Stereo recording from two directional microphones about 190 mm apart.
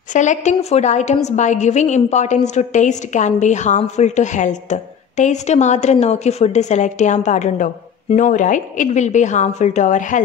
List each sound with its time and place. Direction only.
0.1 s a woman's voice: 40° left (ahead or behind)